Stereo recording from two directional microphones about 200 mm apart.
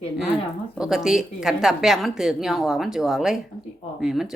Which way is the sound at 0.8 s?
Centre (ahead or behind).